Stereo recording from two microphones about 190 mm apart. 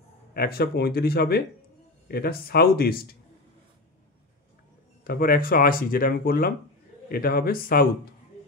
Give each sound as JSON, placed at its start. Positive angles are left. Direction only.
{"t": 0.3, "sound": "speech", "side_deg": 55}
{"t": 5.0, "sound": "speech", "side_deg": 50}